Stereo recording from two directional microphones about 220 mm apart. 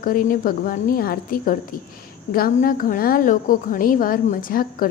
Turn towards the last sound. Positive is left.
turn(degrees=40)  # may be behind; listen again after turning